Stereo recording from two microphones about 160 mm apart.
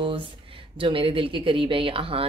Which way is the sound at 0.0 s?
30° right (ahead or behind).